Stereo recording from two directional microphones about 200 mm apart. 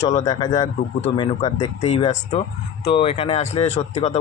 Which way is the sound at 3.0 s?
30° left (ahead or behind).